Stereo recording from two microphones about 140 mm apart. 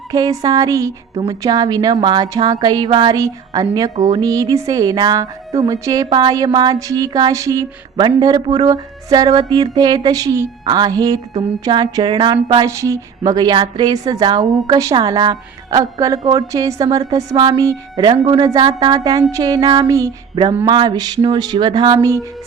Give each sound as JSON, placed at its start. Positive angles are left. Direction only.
{"t": 0.1, "sound": "a woman's voice", "side_deg": -25}
{"t": 11.6, "sound": "a sound", "side_deg": -30}
{"t": 12.6, "sound": "a woman's voice", "side_deg": -20}